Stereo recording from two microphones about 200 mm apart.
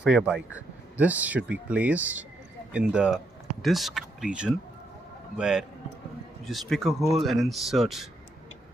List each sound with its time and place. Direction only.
0.0 s speech: 5° right (ahead or behind)